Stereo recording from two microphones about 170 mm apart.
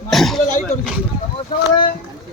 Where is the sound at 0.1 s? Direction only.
Centre (ahead or behind).